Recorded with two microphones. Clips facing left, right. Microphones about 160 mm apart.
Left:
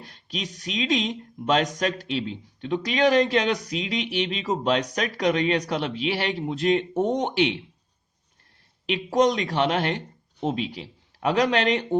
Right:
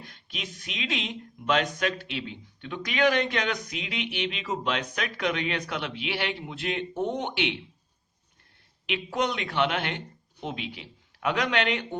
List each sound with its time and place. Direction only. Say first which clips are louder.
0.0 s speech: left 6 dB; 35° left (ahead or behind)
8.9 s speech: left 7 dB; 40° left (ahead or behind)